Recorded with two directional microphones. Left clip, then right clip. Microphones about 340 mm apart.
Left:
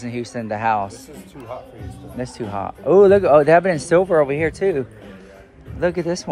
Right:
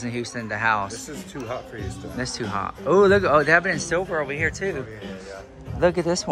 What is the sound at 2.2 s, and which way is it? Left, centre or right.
Speech, centre.